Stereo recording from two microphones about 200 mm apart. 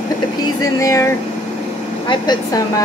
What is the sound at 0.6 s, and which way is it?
A woman's voice, 15° left (ahead or behind).